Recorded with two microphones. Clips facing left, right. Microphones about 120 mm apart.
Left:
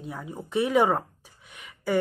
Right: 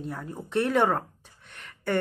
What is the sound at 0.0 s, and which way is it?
Speech, centre (ahead or behind).